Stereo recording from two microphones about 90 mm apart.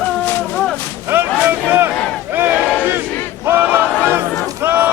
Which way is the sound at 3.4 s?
20° right (ahead or behind).